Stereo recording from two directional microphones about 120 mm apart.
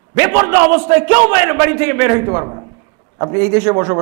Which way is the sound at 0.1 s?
20° right (ahead or behind).